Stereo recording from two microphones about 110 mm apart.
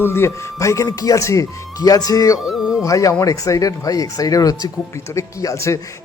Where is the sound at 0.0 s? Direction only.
25° left (ahead or behind).